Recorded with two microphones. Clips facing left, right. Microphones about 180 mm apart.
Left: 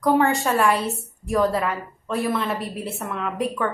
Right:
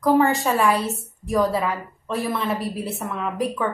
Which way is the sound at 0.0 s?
Centre (ahead or behind).